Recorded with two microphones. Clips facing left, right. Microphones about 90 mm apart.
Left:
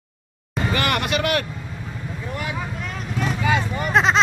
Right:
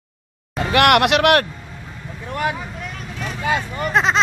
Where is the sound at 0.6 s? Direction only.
70° right (ahead or behind).